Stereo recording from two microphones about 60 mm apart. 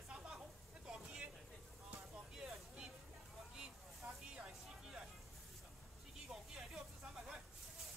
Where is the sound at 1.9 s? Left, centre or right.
Centre.